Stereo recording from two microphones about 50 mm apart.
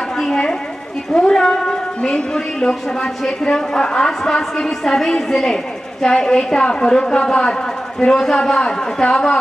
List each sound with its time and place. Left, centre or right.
0.2 s chatter: centre
1.1 s a sound: centre
2.3 s a woman's voice: centre